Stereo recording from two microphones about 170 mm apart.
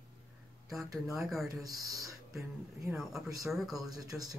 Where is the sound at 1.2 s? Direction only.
Centre (ahead or behind).